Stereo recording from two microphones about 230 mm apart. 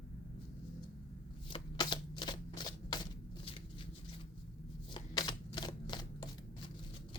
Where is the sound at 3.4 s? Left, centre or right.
Left.